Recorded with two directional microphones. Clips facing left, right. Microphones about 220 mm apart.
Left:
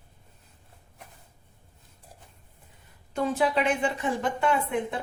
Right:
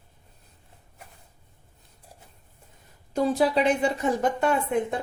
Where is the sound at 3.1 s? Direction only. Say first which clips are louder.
Right 3 dB; 35° right (ahead or behind).